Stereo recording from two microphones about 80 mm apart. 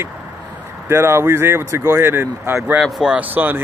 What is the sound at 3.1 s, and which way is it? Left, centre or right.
Speech, right.